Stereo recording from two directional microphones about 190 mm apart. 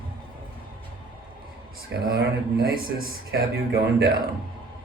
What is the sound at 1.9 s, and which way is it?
Speech, 55° right (ahead or behind).